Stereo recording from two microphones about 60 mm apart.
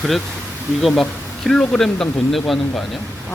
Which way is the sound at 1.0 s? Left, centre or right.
Centre.